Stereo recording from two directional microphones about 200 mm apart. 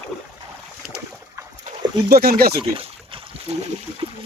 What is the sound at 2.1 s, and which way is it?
Speech, 50° right (ahead or behind).